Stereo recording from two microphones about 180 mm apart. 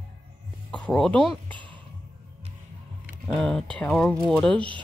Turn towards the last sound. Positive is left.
turn(degrees=5)  # may be behind; listen again after turning